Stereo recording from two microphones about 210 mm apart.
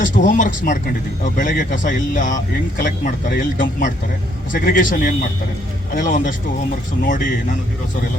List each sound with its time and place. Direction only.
0.0 s speech: 35° left (ahead or behind)